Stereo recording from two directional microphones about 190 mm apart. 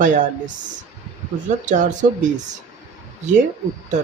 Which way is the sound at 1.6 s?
40° right (ahead or behind).